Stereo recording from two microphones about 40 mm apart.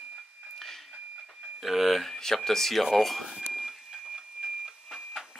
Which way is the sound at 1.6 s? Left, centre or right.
Centre.